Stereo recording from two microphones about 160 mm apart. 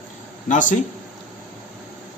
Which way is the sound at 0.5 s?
55° left (ahead or behind).